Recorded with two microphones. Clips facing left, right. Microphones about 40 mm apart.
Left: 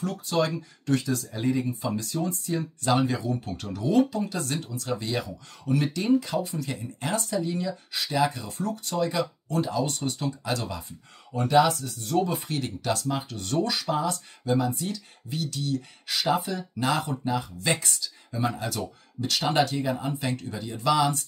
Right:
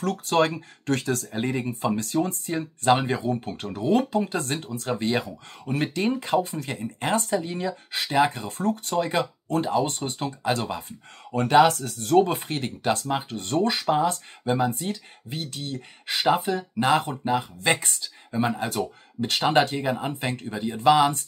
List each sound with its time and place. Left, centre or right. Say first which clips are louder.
0.0 s speech: right 4 dB; right
11.3 s speech: right 3 dB; right
12.2 s speech: right 4 dB; right